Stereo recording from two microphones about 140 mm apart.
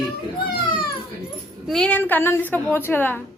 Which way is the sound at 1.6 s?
5° left (ahead or behind).